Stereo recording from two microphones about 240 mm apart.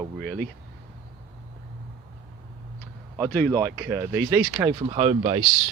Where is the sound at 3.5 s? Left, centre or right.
Centre.